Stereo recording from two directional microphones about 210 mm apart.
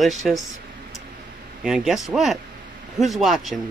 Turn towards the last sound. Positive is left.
turn(degrees=0)  # may be behind; listen again after turning